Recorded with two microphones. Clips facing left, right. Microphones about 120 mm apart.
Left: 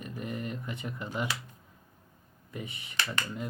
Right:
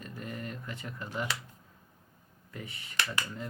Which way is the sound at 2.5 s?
20° left (ahead or behind).